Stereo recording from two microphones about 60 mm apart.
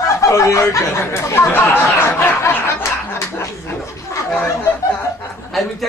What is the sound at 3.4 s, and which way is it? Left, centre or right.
Speech, left.